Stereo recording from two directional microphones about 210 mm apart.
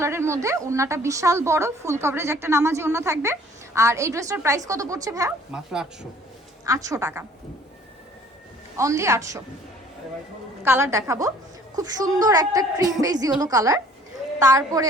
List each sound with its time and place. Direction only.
0.0 s a woman's voice: 10° right (ahead or behind)
5.5 s speech: 5° right (ahead or behind)
6.7 s a woman's voice: 15° right (ahead or behind)
8.8 s a woman's voice: 15° right (ahead or behind)
10.6 s a woman's voice: 10° right (ahead or behind)